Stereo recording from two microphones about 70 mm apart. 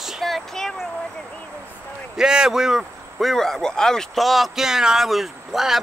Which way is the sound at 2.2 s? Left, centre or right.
Centre.